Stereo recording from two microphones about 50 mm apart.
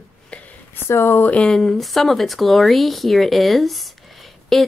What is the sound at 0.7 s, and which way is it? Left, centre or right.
Speech, left.